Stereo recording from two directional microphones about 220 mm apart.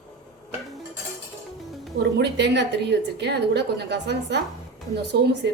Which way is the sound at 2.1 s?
50° right (ahead or behind).